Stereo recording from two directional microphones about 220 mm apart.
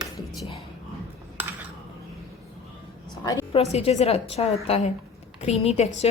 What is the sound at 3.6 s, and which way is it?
A woman's voice, 30° left (ahead or behind).